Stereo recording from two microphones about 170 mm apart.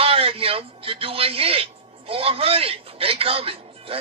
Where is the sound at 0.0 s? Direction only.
35° right (ahead or behind).